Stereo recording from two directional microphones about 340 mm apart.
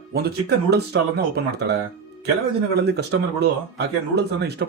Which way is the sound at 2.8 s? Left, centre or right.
Right.